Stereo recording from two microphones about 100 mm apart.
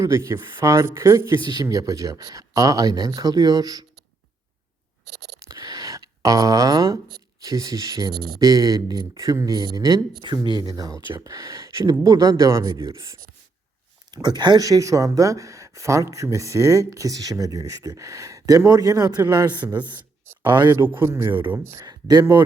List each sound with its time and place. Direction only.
0.0 s speech: 30° right (ahead or behind)
5.5 s a sound: 40° right (ahead or behind)
7.4 s a man's voice: 40° right (ahead or behind)
20.8 s speech: 25° right (ahead or behind)
21.8 s speech: 40° right (ahead or behind)